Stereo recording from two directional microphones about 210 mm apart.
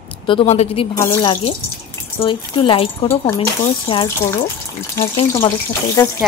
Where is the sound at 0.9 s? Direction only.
15° left (ahead or behind).